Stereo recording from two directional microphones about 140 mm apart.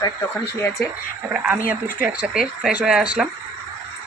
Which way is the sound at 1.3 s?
10° right (ahead or behind).